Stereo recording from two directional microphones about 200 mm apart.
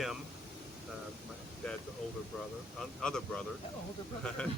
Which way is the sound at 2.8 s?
5° left (ahead or behind).